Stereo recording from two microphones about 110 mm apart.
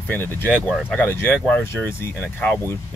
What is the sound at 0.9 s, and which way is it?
Speech, 15° left (ahead or behind).